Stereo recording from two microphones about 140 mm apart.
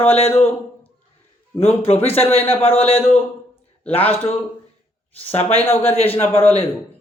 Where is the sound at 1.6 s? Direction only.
45° left (ahead or behind).